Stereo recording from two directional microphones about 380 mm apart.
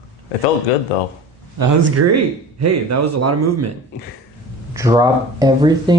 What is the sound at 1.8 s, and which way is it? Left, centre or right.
A man's voice, right.